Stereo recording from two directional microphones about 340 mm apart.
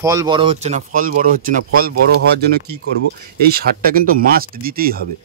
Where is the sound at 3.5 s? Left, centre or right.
Right.